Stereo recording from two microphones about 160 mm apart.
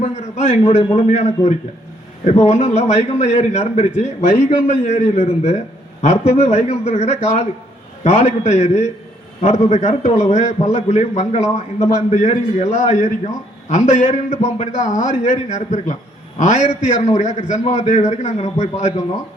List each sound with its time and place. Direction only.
0.0 s a man's voice: 45° left (ahead or behind)